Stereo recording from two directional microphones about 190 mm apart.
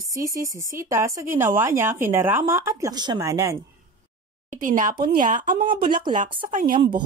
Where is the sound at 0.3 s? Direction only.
15° right (ahead or behind).